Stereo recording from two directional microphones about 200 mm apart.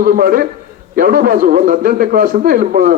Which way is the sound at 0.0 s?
45° right (ahead or behind).